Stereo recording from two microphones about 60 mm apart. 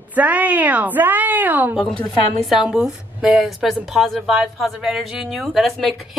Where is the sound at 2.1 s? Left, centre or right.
Centre.